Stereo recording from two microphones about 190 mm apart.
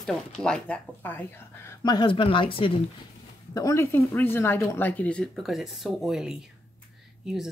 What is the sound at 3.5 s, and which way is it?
Speech, 15° left (ahead or behind).